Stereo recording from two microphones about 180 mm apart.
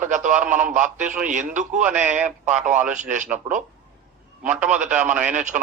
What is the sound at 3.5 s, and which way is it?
Speech, 10° right (ahead or behind).